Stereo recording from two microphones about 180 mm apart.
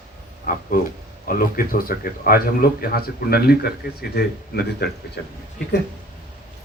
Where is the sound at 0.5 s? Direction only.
50° left (ahead or behind); by 5.3 s 65° left (ahead or behind).